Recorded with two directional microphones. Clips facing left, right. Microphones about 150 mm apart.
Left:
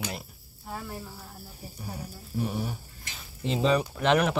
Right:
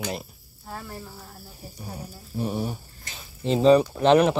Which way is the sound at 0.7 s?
5° left (ahead or behind).